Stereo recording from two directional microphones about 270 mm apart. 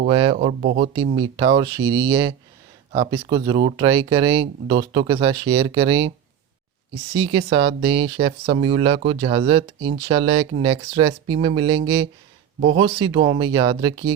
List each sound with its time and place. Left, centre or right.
0.1 s speech: centre
7.2 s speech: centre
12.8 s speech: centre